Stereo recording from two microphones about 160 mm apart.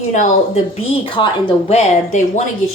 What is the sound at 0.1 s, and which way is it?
Speech, 50° left (ahead or behind).